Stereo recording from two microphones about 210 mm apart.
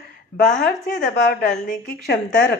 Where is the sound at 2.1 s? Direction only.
50° left (ahead or behind).